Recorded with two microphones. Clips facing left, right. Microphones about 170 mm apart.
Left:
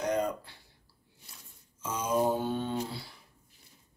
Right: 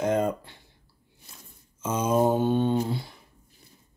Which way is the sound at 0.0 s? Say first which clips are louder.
Right 5 dB; 25° right (ahead or behind).